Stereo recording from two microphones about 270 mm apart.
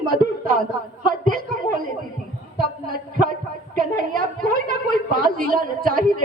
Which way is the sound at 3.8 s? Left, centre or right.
Right.